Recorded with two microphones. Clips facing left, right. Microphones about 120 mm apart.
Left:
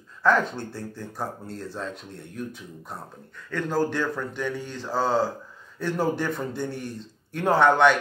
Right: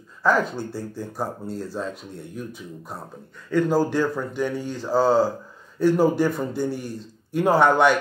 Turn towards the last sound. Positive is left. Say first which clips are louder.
# right 1 dB
turn(degrees=-10)  # may be behind; listen again after turning